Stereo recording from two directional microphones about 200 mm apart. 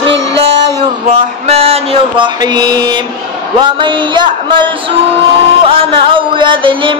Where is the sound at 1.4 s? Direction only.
30° right (ahead or behind).